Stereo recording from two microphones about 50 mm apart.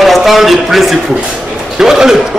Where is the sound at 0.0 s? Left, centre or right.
Centre.